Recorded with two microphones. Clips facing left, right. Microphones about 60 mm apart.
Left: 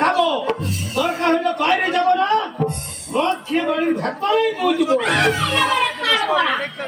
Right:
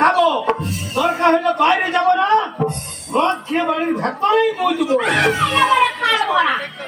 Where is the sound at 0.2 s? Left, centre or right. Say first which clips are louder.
Right 3 dB; centre.